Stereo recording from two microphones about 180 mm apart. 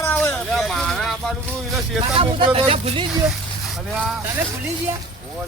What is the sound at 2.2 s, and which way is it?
Speech, 30° right (ahead or behind).